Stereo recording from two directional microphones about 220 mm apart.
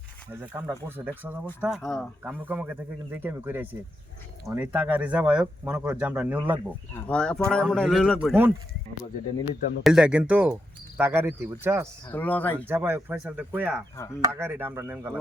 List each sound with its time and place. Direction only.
0.5 s speech: 10° right (ahead or behind)
7.1 s speech: 5° left (ahead or behind)
9.8 s speech: 5° right (ahead or behind)
12.0 s speech: 10° left (ahead or behind)
12.5 s speech: 10° right (ahead or behind)
13.9 s speech: 10° left (ahead or behind)
14.2 s speech: 15° right (ahead or behind)